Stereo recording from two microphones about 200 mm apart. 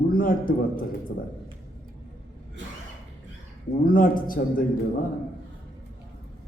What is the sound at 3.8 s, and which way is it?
Speech, 45° left (ahead or behind).